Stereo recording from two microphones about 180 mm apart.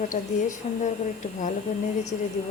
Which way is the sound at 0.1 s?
40° left (ahead or behind).